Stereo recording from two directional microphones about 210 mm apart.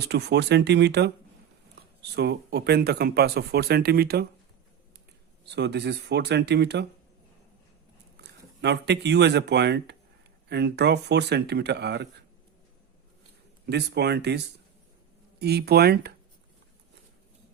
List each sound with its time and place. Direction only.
0.1 s speech: 50° right (ahead or behind)
5.5 s speech: 55° right (ahead or behind)
8.1 s speech: 55° right (ahead or behind)
13.7 s speech: 50° right (ahead or behind)